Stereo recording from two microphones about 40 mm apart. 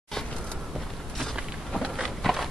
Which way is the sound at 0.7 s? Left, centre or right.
Centre.